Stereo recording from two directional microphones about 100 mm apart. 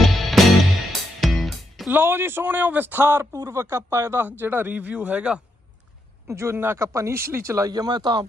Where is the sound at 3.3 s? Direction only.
35° right (ahead or behind); by 5.4 s 10° right (ahead or behind).